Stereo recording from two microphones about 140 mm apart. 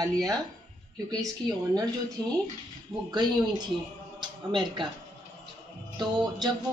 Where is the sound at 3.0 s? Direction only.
30° right (ahead or behind).